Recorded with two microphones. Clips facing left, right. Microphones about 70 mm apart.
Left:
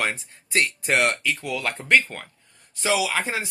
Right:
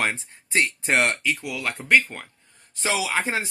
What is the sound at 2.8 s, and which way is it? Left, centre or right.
Speech, right.